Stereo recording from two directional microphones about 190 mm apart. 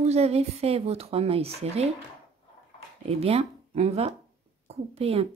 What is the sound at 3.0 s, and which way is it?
A woman's voice, 30° right (ahead or behind).